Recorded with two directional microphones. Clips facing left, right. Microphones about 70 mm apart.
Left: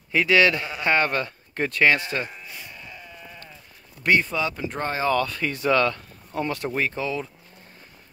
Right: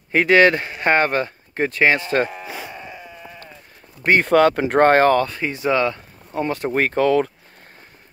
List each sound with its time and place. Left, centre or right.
0.1 s a man's voice: right
2.2 s sheep: right
2.7 s sheep: right
3.0 s sheep: centre
4.2 s speech: right
5.1 s speech: right
6.7 s speech: right